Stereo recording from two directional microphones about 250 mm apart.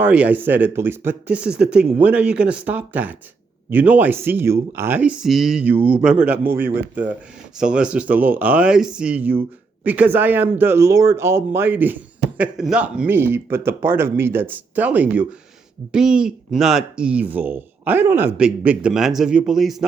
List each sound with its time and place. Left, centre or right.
0.0 s a man's voice: centre